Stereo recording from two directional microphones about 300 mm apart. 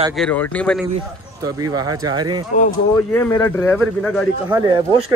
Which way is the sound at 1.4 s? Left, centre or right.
Centre.